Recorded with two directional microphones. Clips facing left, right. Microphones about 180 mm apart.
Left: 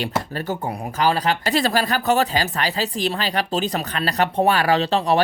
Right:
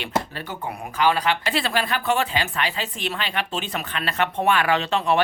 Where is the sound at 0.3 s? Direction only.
45° left (ahead or behind).